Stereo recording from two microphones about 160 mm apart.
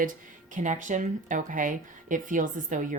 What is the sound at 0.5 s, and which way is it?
Speech, 50° right (ahead or behind).